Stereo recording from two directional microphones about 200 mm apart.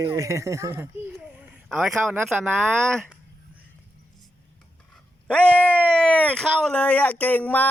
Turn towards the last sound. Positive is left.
turn(degrees=10)  # may be behind; listen again after turning